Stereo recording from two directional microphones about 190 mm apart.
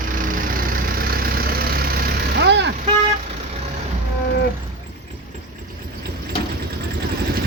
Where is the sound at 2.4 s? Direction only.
65° right (ahead or behind).